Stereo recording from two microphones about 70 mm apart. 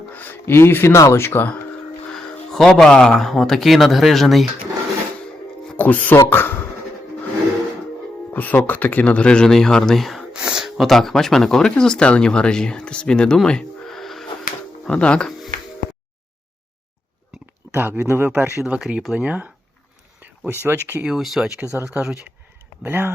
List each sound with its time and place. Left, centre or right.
0.1 s speech: left
2.1 s speech: centre
5.7 s speech: left
8.3 s speech: left; by 10.2 s centre
10.3 s gasp: centre
10.8 s speech: centre
17.7 s speech: right
18.8 s speech: centre
20.7 s speech: right
21.2 s speech: centre
22.8 s speech: right